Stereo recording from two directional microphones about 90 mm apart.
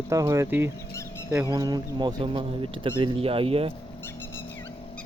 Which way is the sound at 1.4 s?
45° right (ahead or behind).